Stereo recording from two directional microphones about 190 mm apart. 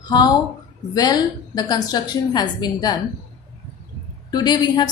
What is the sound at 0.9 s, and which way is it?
A woman's voice, 20° left (ahead or behind).